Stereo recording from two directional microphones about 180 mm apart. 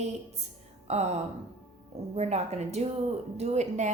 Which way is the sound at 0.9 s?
35° right (ahead or behind).